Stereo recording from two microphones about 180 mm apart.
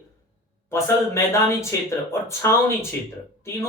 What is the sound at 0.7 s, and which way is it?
Speech, 15° left (ahead or behind).